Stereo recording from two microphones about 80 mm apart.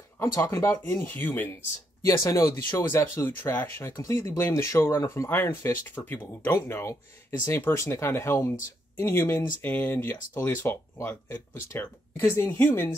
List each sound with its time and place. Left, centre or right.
0.2 s speech: left
2.0 s speech: left